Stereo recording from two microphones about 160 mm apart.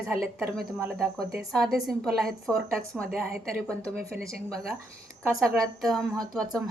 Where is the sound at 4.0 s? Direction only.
70° right (ahead or behind).